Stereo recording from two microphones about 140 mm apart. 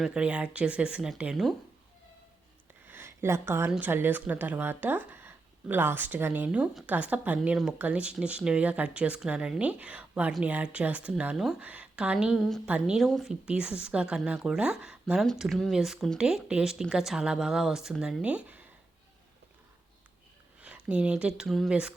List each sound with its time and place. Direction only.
0.0 s speech: 5° right (ahead or behind)
2.8 s a sound: 15° right (ahead or behind)
3.7 s a woman's voice: 10° right (ahead or behind)
20.6 s speech: 10° right (ahead or behind)